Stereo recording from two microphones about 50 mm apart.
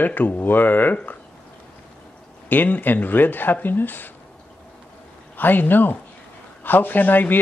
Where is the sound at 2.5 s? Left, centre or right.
Left.